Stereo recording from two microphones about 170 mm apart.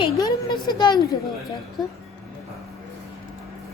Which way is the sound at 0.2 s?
25° left (ahead or behind).